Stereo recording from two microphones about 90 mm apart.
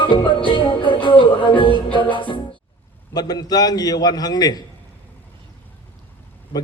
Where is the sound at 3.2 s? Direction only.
45° left (ahead or behind).